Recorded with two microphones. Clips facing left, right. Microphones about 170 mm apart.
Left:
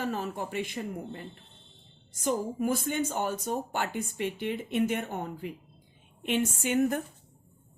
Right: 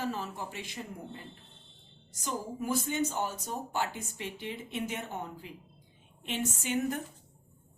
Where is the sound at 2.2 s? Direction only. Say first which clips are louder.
Left 7 dB; 55° left (ahead or behind).